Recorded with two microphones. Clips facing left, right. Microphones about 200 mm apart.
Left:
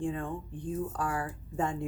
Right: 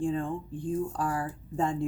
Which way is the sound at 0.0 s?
30° right (ahead or behind).